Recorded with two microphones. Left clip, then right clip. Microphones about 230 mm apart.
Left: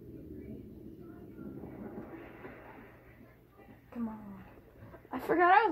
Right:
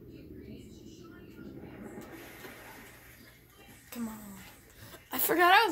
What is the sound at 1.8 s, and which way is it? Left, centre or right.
Train, right.